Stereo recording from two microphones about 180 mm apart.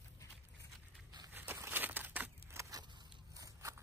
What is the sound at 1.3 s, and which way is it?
Crushing, 10° right (ahead or behind).